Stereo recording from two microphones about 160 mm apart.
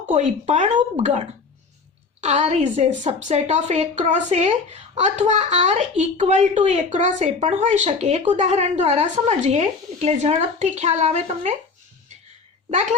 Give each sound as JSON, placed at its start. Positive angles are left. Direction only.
{"t": 0.1, "sound": "a woman's voice", "side_deg": -45}
{"t": 2.2, "sound": "a woman's voice", "side_deg": -45}